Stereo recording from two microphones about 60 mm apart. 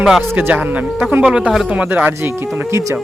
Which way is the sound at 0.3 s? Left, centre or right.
Right.